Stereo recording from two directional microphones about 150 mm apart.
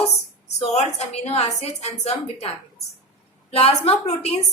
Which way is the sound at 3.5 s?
45° left (ahead or behind).